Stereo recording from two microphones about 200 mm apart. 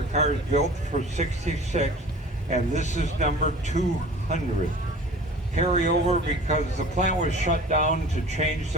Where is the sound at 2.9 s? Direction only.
35° right (ahead or behind).